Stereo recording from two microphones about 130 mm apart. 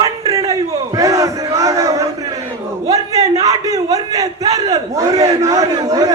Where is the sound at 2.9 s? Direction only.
25° right (ahead or behind).